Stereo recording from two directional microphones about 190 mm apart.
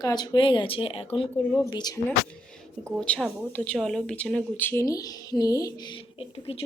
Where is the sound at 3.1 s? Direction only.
5° left (ahead or behind).